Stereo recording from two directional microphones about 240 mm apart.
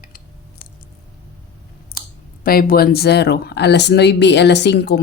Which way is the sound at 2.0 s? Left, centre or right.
Left.